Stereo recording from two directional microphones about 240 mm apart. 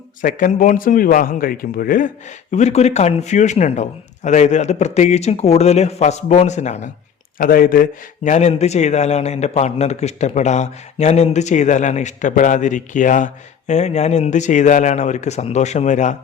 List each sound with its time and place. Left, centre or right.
0.2 s a man's voice: left